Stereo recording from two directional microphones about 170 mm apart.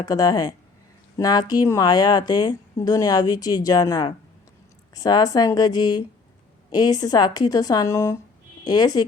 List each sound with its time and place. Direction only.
0.0 s speech: 20° left (ahead or behind)